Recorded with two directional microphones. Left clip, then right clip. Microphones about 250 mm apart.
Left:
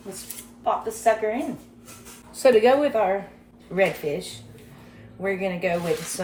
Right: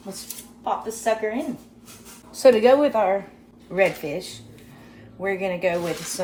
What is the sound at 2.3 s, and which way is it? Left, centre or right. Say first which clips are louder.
Speech: right 2 dB; right.